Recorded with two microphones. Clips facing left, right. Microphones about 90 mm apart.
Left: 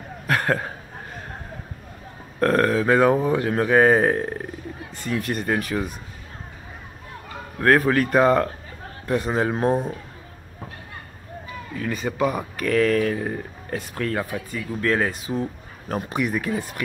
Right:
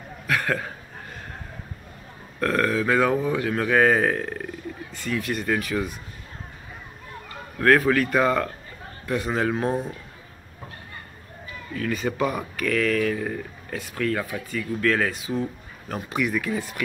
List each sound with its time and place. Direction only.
0.3 s speech: 35° left (ahead or behind)
2.4 s speech: 35° left (ahead or behind)
7.5 s speech: 25° left (ahead or behind)
11.7 s speech: 20° left (ahead or behind)
12.5 s speech: 30° left (ahead or behind)